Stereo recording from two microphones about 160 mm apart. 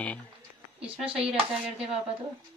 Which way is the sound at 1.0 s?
35° right (ahead or behind).